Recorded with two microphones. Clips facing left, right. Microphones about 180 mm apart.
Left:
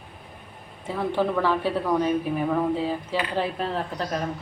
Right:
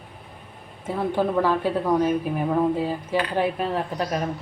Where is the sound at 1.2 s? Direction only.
15° right (ahead or behind).